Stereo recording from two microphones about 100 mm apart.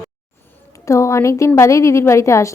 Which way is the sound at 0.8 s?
30° left (ahead or behind).